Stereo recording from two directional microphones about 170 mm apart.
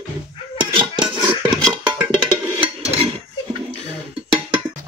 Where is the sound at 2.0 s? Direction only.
30° right (ahead or behind).